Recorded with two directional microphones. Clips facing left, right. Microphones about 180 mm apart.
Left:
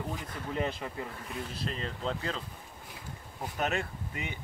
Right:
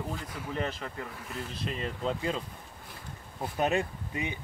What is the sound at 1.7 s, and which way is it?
Speech, 10° right (ahead or behind).